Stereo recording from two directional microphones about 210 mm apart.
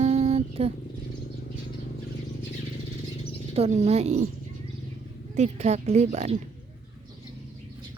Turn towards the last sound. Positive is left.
turn(degrees=-35)  # may be behind; listen again after turning